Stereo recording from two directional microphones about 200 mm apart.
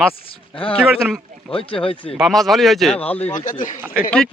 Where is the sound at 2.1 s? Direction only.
Centre (ahead or behind).